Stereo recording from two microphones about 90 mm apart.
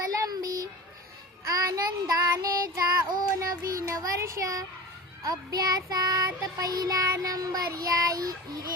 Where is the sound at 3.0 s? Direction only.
45° right (ahead or behind).